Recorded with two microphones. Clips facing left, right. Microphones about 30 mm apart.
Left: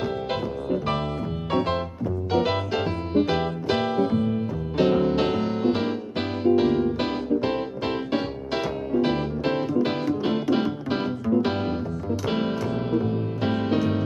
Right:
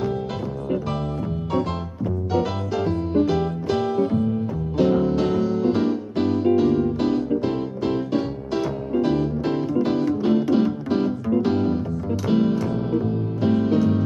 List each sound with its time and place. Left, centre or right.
2.3 s music: left
12.5 s music: centre
13.4 s music: left